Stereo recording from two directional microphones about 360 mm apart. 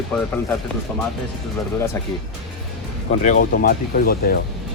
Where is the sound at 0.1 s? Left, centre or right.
Centre.